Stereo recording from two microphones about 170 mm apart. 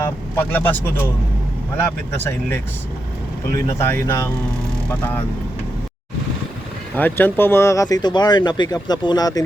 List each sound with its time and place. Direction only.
0.0 s speech: 10° left (ahead or behind)
3.8 s speech: 15° left (ahead or behind)
6.9 s speech: 10° left (ahead or behind)